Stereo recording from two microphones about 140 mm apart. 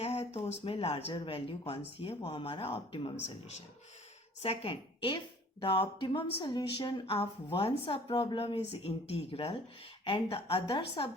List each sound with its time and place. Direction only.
0.0 s speech: 50° left (ahead or behind)
4.4 s a woman's voice: 40° left (ahead or behind)